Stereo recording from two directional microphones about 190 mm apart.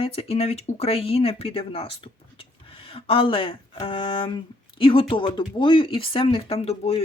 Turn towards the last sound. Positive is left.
turn(degrees=30)  # may be behind; listen again after turning